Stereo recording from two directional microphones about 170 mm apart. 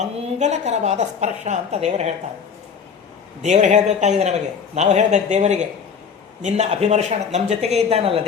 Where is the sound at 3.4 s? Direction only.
45° right (ahead or behind).